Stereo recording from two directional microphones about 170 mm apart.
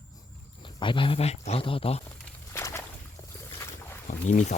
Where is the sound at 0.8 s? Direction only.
30° left (ahead or behind).